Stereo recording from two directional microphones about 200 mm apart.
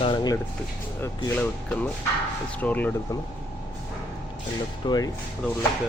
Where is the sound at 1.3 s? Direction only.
10° left (ahead or behind).